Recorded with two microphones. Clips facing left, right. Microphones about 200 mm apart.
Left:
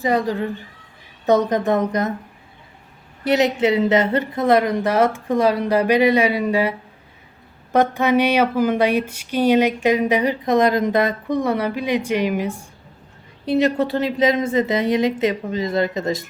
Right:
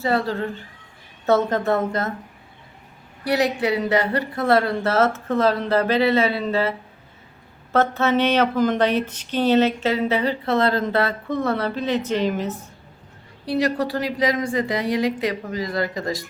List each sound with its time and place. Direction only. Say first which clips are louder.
0.0 s speech: left 2 dB; 15° left (ahead or behind)
3.2 s speech: left 4 dB; 20° left (ahead or behind)
13.4 s a woman's voice: left 4 dB; 20° left (ahead or behind)